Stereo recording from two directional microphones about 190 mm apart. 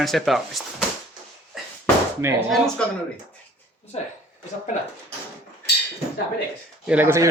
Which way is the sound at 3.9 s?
35° left (ahead or behind).